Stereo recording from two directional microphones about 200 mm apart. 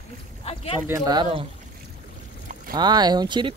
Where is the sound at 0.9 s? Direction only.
20° right (ahead or behind).